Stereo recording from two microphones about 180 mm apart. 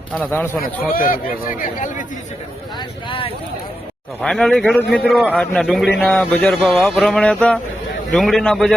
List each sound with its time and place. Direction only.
0.1 s a man's voice: 10° left (ahead or behind)
0.9 s speech: 50° left (ahead or behind)
3.1 s speech: 30° left (ahead or behind)
4.2 s a man's voice: 5° left (ahead or behind)